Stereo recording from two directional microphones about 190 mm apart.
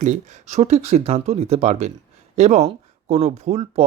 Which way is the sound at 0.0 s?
35° right (ahead or behind).